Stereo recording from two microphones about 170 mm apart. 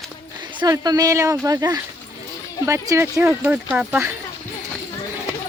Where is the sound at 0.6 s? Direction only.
20° right (ahead or behind).